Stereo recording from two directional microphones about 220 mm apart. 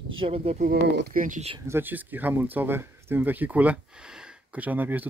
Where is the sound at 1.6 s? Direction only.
10° right (ahead or behind).